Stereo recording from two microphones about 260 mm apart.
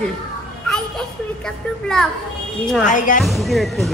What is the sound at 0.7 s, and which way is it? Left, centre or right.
A child's voice, centre.